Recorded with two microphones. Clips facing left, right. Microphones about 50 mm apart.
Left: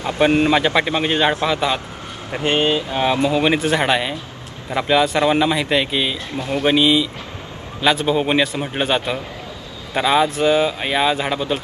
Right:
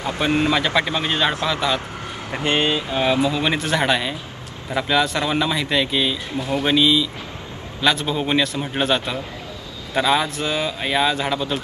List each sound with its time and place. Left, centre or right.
0.5 s speech: left
0.7 s speech: centre
3.5 s speech: centre